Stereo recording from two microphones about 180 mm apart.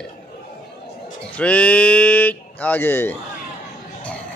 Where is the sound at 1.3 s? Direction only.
5° left (ahead or behind).